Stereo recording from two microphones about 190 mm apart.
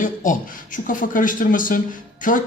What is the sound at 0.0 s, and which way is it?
Speech, 45° left (ahead or behind).